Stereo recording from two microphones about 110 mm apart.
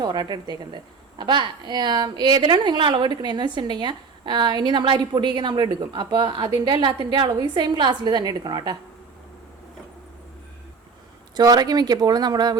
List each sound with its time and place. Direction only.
0.0 s a woman's voice: 40° right (ahead or behind)
11.3 s speech: 40° right (ahead or behind)